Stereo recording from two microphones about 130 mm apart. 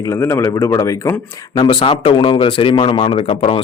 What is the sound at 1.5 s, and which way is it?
Speech, 40° left (ahead or behind).